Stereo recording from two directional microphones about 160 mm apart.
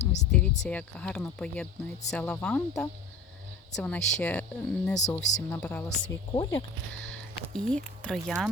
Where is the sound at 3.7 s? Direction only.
10° left (ahead or behind).